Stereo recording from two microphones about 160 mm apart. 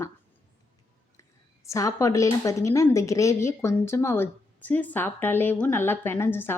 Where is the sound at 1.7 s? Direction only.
20° left (ahead or behind).